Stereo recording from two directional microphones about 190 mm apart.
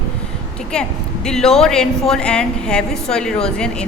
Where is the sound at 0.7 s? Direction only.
5° left (ahead or behind).